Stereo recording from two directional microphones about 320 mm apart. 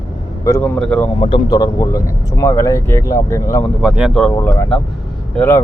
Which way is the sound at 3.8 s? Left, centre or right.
Centre.